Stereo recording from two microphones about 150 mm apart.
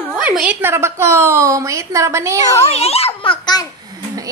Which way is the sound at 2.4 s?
45° left (ahead or behind).